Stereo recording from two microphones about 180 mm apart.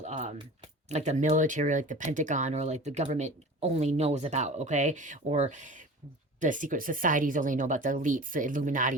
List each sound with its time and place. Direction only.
0.0 s speech: 35° right (ahead or behind)